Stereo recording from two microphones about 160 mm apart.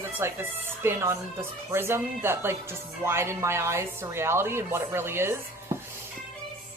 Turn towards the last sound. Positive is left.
turn(degrees=-15)  # may be behind; listen again after turning